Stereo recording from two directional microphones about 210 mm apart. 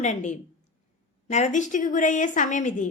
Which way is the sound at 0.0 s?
35° left (ahead or behind).